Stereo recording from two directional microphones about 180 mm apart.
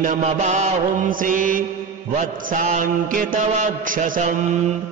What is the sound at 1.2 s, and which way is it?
Mantra, 50° right (ahead or behind).